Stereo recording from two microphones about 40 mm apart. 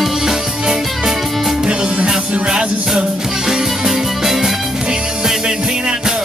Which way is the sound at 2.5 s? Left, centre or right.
Centre.